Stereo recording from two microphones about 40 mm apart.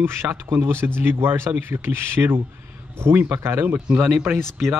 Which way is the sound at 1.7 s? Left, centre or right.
Right.